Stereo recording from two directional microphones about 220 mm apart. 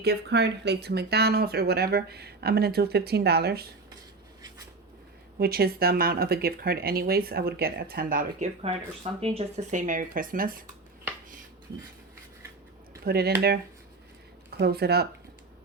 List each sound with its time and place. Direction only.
0.0 s speech: 50° right (ahead or behind)
5.4 s speech: 45° right (ahead or behind)
9.2 s speech: 25° right (ahead or behind)
13.1 s speech: 45° right (ahead or behind)
14.5 s speech: 45° right (ahead or behind)